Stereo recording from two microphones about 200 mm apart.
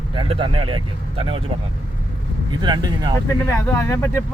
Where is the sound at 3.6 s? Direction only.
15° left (ahead or behind).